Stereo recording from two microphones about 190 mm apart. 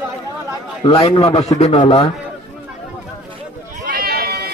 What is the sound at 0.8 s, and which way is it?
Speech, 30° left (ahead or behind).